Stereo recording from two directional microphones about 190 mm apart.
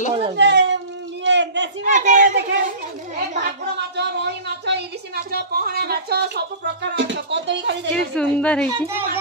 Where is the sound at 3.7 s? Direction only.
60° right (ahead or behind).